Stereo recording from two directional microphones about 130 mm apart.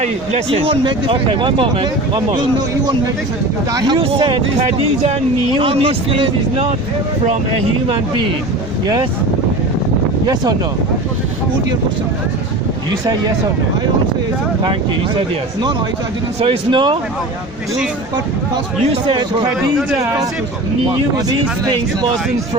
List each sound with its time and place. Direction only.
0.5 s speech: 45° right (ahead or behind)
3.9 s speech: 40° right (ahead or behind)
4.6 s speech: 55° right (ahead or behind)
5.5 s speech: 45° right (ahead or behind)
14.6 s speech: 40° right (ahead or behind)
16.4 s speech: 40° right (ahead or behind)
20.9 s speech: 35° right (ahead or behind)